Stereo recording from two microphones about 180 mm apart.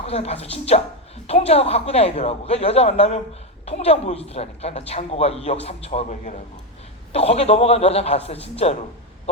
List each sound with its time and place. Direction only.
0.1 s a man's voice: 35° left (ahead or behind)